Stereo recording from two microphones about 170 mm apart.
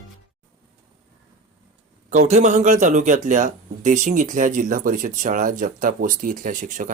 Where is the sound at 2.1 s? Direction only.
45° right (ahead or behind).